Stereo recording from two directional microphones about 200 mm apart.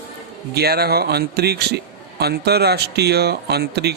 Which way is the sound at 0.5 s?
50° right (ahead or behind).